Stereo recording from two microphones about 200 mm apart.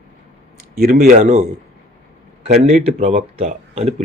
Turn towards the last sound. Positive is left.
turn(degrees=-30)  # may be behind; listen again after turning